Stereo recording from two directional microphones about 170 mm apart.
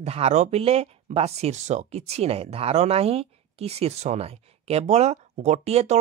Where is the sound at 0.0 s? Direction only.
40° right (ahead or behind).